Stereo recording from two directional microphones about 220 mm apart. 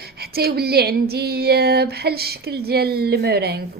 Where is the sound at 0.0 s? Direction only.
45° right (ahead or behind).